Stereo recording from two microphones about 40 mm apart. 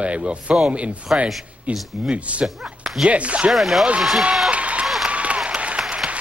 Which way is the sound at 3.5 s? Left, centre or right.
Centre.